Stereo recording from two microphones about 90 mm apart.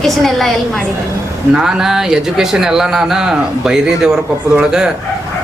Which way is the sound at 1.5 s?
5° right (ahead or behind).